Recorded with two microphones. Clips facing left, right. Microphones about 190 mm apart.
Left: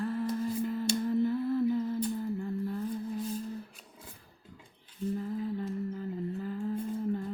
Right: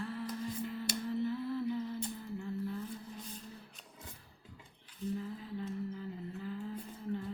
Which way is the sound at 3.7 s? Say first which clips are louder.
Left 2 dB; 10° left (ahead or behind).